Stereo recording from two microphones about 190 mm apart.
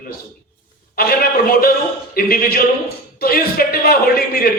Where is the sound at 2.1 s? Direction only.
50° left (ahead or behind).